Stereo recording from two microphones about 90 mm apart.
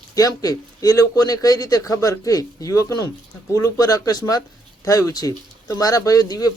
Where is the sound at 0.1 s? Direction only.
40° left (ahead or behind).